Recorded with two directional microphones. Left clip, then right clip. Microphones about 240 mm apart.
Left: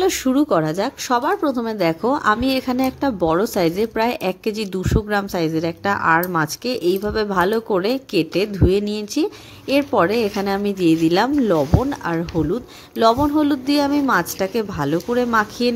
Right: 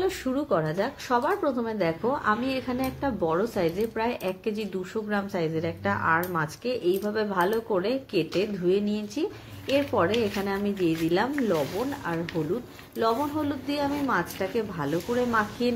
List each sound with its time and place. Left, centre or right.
0.0 s speech: left
13.0 s speech: left